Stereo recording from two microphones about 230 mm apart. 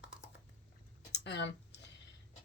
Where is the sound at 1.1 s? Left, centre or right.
Left.